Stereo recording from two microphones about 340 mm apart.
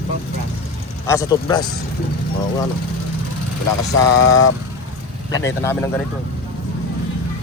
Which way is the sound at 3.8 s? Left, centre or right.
Left.